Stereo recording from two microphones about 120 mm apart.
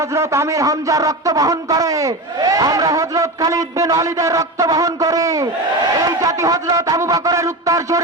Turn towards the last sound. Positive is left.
turn(degrees=-25)  # may be behind; listen again after turning